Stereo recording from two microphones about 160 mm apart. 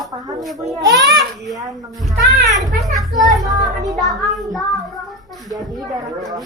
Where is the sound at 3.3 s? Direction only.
Centre (ahead or behind).